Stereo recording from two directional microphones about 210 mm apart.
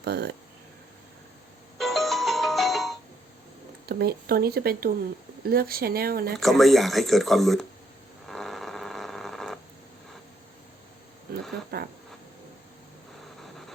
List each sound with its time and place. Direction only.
0.0 s speech: 50° right (ahead or behind)
1.8 s ringtone: centre (ahead or behind)
3.8 s speech: 50° right (ahead or behind)
6.3 s speech: centre (ahead or behind)
8.3 s a sound: centre (ahead or behind)
11.7 s a sound: 50° right (ahead or behind)